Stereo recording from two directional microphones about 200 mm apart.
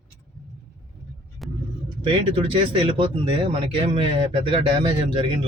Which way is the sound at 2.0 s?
30° right (ahead or behind).